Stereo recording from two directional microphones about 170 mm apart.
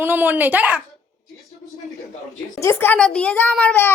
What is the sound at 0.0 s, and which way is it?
Speech, 10° right (ahead or behind).